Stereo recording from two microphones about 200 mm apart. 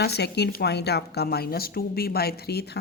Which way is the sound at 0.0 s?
55° left (ahead or behind).